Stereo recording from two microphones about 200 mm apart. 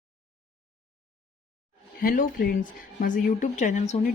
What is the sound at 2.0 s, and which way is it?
Speech, 45° left (ahead or behind).